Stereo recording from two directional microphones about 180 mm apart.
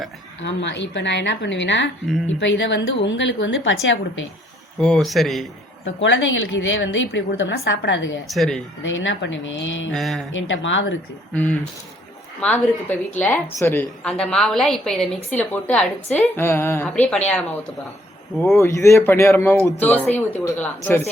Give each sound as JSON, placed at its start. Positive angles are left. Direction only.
{"t": 0.4, "sound": "a woman's voice", "side_deg": 80}
{"t": 4.8, "sound": "a woman's voice", "side_deg": 5}
{"t": 5.8, "sound": "a woman's voice", "side_deg": 90}
{"t": 8.3, "sound": "a woman's voice", "side_deg": 0}
{"t": 8.8, "sound": "a woman's voice", "side_deg": 90}
{"t": 9.9, "sound": "a woman's voice", "side_deg": 0}
{"t": 10.3, "sound": "a woman's voice", "side_deg": 90}
{"t": 12.4, "sound": "a woman's voice", "side_deg": 10}
{"t": 18.5, "sound": "a woman's voice", "side_deg": 15}